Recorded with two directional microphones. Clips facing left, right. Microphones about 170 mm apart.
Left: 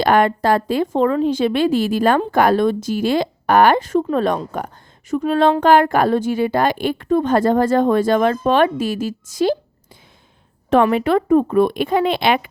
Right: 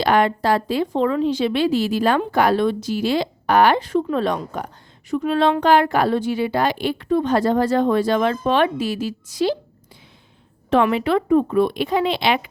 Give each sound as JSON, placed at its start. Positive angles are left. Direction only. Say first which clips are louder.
{"t": 0.0, "sound": "a woman's voice", "louder": "left 2 dB", "side_deg": 50}
{"t": 10.9, "sound": "a woman's voice", "louder": "left 2 dB", "side_deg": 45}